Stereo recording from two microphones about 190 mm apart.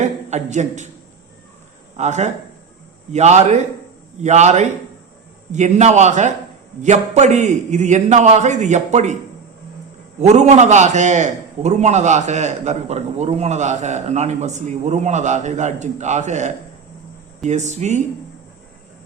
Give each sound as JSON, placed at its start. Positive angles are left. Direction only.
{"t": 0.0, "sound": "speech", "side_deg": -40}
{"t": 2.0, "sound": "a man's voice", "side_deg": -35}
{"t": 10.2, "sound": "a man's voice", "side_deg": -35}